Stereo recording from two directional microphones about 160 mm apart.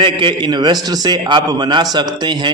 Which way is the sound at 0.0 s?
30° right (ahead or behind).